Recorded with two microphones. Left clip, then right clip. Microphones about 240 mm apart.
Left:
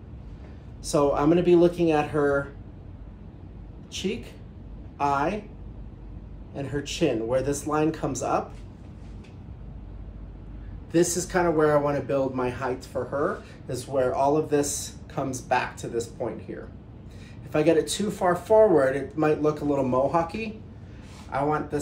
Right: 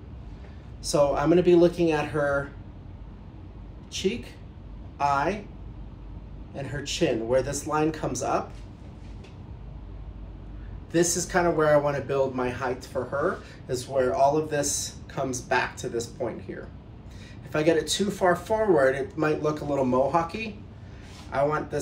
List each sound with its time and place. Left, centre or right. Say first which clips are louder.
0.9 s speech: even; centre
3.9 s speech: right 2 dB; centre
6.5 s speech: left 1 dB; centre
10.9 s speech: left 1 dB; centre